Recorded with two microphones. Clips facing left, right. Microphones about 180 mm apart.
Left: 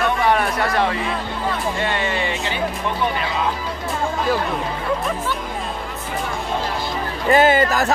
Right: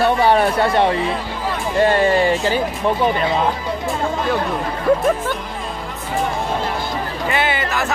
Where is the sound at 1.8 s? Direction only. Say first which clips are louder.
Right 8 dB; 40° right (ahead or behind).